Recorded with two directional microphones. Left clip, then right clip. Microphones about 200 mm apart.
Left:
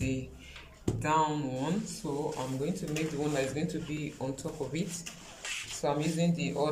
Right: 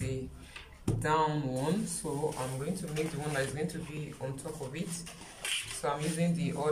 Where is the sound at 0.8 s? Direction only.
5° left (ahead or behind).